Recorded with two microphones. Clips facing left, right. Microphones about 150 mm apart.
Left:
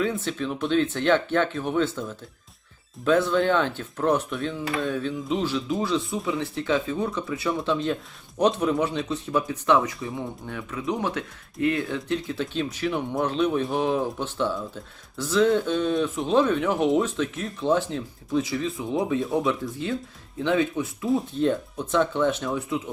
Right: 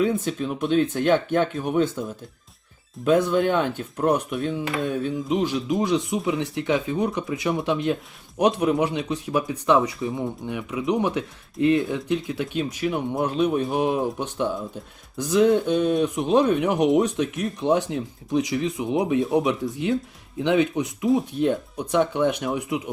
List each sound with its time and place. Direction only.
0.0 s speech: 15° right (ahead or behind)
13.7 s speech: 15° right (ahead or behind)